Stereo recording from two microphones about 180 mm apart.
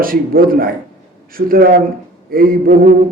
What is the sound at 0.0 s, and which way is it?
A man's voice, 55° right (ahead or behind).